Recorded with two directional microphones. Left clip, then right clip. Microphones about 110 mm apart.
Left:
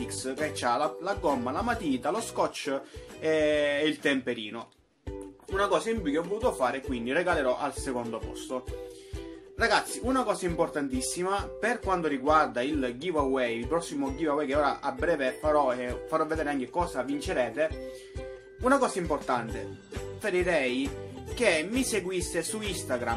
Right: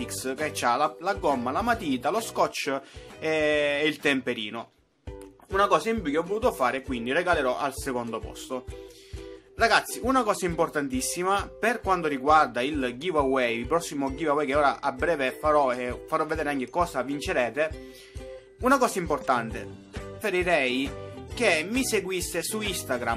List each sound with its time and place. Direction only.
0.0 s speech: 40° right (ahead or behind)
5.5 s speech: 60° right (ahead or behind); by 7.0 s 40° right (ahead or behind)
7.1 s speech: 25° right (ahead or behind)
16.7 s speech: 50° right (ahead or behind)
20.2 s speech: 35° right (ahead or behind)